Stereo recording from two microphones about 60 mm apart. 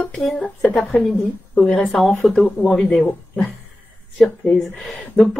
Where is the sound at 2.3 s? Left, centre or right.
Left.